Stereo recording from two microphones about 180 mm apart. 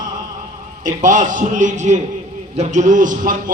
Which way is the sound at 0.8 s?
45° right (ahead or behind).